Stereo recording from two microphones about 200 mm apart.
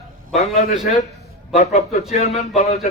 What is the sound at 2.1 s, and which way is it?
Speech, 30° left (ahead or behind).